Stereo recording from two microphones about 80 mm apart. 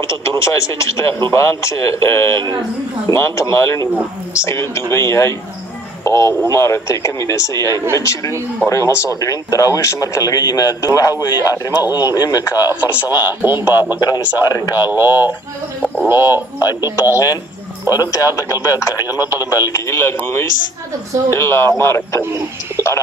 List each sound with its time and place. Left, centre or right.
0.4 s speech: left
13.4 s speech: right
13.9 s a man's voice: left
14.8 s speech: right
17.1 s speech: left